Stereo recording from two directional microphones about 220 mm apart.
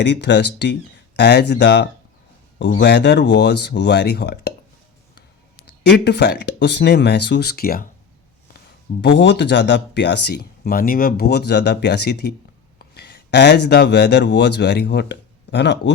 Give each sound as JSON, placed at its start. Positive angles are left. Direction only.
{"t": 0.0, "sound": "speech", "side_deg": 50}
{"t": 5.8, "sound": "speech", "side_deg": 50}
{"t": 9.0, "sound": "speech", "side_deg": 50}